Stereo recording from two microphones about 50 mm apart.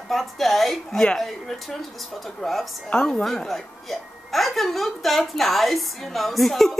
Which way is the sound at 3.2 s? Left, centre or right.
Centre.